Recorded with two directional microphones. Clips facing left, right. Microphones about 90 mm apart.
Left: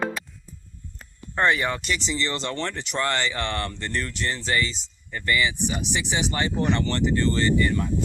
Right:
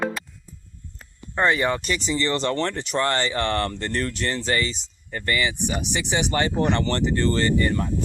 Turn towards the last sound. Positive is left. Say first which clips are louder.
# right 1 dB
turn(degrees=-45)  # may be behind; listen again after turning